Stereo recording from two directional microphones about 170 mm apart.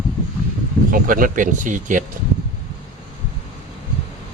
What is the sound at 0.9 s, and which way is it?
Speech, 55° right (ahead or behind).